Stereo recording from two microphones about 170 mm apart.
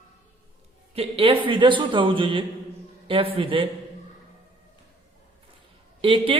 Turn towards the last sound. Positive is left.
turn(degrees=-30)  # may be behind; listen again after turning